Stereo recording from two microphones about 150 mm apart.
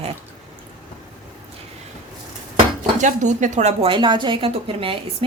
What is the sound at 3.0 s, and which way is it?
A woman's voice, 55° right (ahead or behind).